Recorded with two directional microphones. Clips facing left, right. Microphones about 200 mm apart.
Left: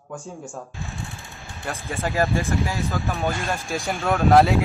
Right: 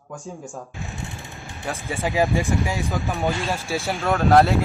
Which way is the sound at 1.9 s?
15° right (ahead or behind).